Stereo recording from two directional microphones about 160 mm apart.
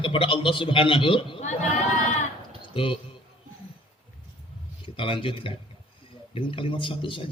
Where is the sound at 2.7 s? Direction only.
35° left (ahead or behind).